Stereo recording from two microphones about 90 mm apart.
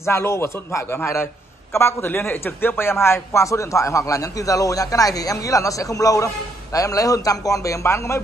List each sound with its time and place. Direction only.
0.0 s a man's voice: 30° left (ahead or behind)